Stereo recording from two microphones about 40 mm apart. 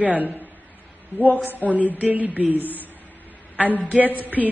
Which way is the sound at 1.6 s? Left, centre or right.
Right.